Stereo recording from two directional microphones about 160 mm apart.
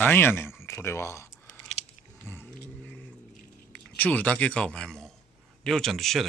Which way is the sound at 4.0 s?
10° left (ahead or behind).